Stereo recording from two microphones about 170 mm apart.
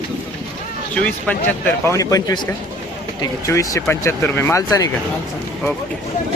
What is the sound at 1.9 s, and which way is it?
A man's voice, 20° left (ahead or behind).